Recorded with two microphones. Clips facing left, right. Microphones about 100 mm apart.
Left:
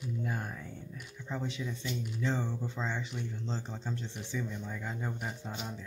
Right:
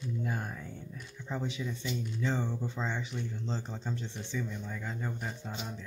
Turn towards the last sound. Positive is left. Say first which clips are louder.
# even
turn(degrees=10)  # may be behind; listen again after turning